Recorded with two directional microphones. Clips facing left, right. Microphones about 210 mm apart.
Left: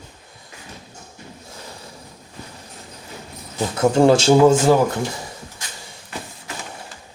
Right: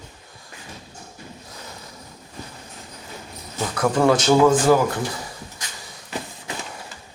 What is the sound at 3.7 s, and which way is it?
Speech, 25° left (ahead or behind).